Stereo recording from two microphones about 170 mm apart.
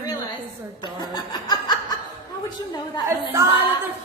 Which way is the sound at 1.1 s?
25° left (ahead or behind).